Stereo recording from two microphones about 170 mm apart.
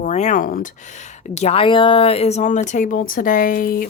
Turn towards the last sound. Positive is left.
turn(degrees=55)  # may be behind; listen again after turning